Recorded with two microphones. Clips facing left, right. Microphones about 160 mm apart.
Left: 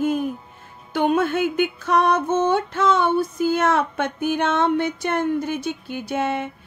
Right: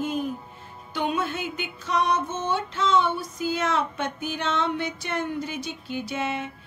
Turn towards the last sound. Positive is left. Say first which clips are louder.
# left 5 dB
turn(degrees=55)  # may be behind; listen again after turning